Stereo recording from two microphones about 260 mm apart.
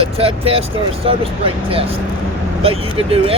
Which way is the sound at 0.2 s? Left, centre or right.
Right.